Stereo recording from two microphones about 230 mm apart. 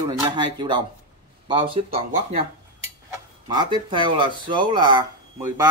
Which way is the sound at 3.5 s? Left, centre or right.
Centre.